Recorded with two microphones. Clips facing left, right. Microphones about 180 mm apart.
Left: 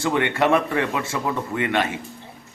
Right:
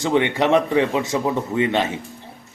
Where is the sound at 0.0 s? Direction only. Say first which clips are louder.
Right 2 dB; 20° right (ahead or behind).